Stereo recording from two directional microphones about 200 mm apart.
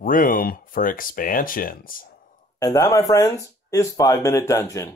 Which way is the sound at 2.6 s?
15° left (ahead or behind).